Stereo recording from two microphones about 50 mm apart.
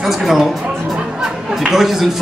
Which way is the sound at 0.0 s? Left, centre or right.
Centre.